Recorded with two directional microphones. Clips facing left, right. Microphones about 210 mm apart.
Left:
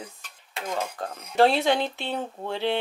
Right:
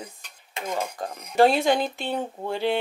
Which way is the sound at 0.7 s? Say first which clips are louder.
Right 1 dB; 10° right (ahead or behind).